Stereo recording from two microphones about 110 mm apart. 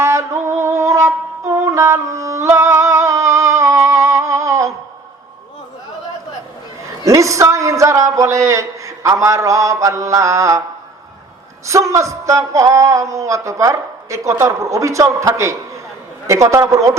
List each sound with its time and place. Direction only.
0.0 s wind instrument: 25° right (ahead or behind)
6.8 s a man's voice: 30° right (ahead or behind)
11.6 s speech: 30° right (ahead or behind)